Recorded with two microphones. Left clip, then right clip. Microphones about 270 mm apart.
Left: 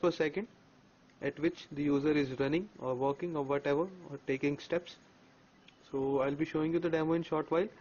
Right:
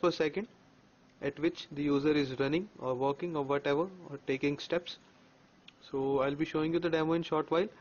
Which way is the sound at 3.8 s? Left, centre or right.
Centre.